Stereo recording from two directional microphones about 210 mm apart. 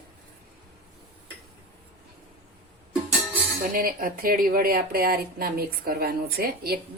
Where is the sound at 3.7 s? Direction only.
45° right (ahead or behind).